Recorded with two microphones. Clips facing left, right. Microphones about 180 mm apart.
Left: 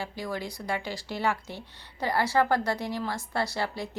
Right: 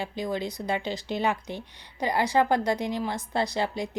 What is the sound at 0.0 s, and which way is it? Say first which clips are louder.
Speech: right 4 dB; 20° right (ahead or behind).